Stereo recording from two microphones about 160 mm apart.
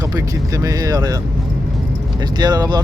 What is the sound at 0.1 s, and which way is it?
Speech, 20° right (ahead or behind).